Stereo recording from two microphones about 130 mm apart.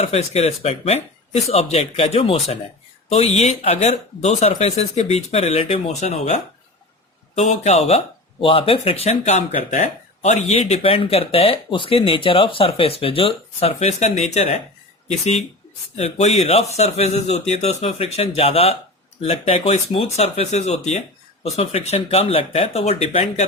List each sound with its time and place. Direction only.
0.0 s speech: 55° left (ahead or behind)
10.6 s speech: 50° left (ahead or behind)
16.0 s speech: 60° left (ahead or behind)